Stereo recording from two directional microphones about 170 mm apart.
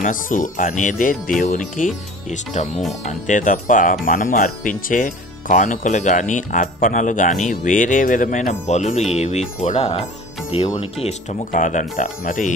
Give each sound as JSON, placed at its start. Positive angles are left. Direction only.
{"t": 0.0, "sound": "speech", "side_deg": 50}